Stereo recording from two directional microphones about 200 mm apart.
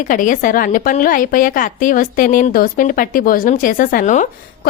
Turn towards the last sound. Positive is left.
turn(degrees=40)  # may be behind; listen again after turning